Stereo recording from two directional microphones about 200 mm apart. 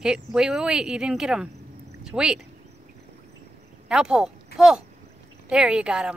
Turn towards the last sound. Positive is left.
turn(degrees=-5)  # may be behind; listen again after turning